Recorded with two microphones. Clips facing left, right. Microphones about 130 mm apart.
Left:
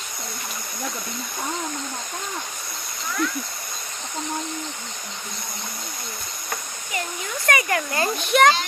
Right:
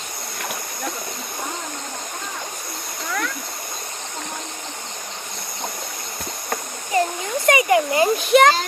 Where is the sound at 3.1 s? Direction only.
60° right (ahead or behind).